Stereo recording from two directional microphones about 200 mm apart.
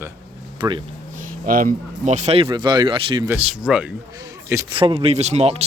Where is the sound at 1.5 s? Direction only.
45° right (ahead or behind); by 3.2 s 25° right (ahead or behind).